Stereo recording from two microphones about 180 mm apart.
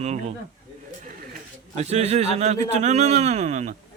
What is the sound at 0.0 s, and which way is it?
Speech, 40° right (ahead or behind).